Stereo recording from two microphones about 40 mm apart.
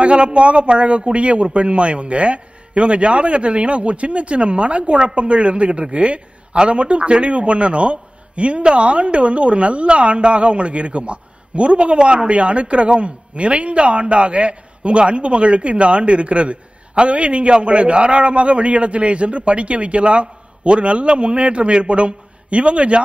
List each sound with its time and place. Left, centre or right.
0.0 s a man's voice: right